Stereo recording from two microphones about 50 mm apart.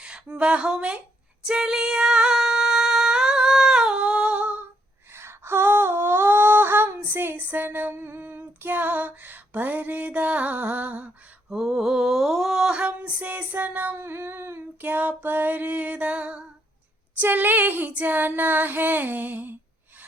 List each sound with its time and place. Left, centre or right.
0.0 s speech: centre
1.5 s female singing: centre; by 4.6 s right
5.1 s a sound: right
7.9 s female singing: right
11.4 s mantra: centre
12.7 s female singing: right
14.8 s female singing: right
17.2 s female singing: right